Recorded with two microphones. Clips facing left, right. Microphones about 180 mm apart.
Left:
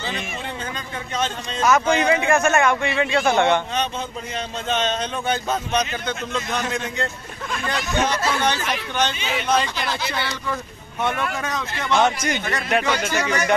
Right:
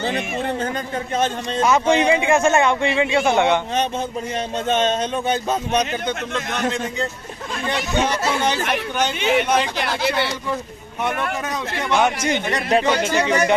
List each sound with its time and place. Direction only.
1.7 s a man's voice: 25° right (ahead or behind)
4.6 s speech: 50° right (ahead or behind)
7.6 s speech: 20° right (ahead or behind)
8.5 s speech: 55° right (ahead or behind)
11.4 s speech: 10° right (ahead or behind)
12.2 s a man's voice: 20° right (ahead or behind)